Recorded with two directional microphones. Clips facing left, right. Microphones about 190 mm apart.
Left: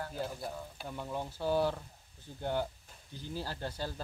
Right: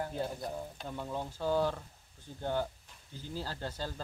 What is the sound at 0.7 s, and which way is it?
Speech, 5° left (ahead or behind).